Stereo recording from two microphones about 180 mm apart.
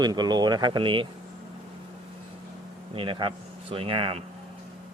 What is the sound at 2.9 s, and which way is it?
Speech, 30° right (ahead or behind).